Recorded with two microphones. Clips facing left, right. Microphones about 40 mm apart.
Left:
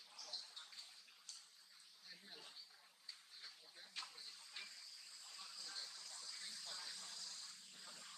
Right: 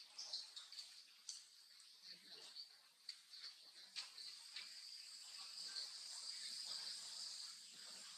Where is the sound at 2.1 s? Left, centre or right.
Left.